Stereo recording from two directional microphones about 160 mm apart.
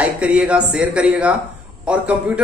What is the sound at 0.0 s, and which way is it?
A man's voice, 5° right (ahead or behind).